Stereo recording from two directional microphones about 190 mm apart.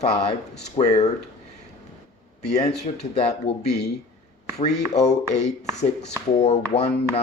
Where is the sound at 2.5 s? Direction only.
35° left (ahead or behind).